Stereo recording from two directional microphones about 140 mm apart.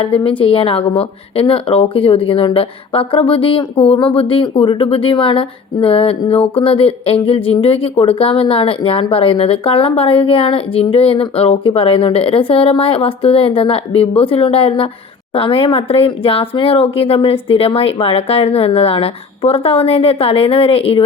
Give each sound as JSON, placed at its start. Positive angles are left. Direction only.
{"t": 0.0, "sound": "speech", "side_deg": 40}